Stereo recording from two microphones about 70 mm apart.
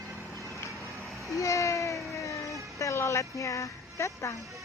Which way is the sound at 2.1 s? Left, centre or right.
Left.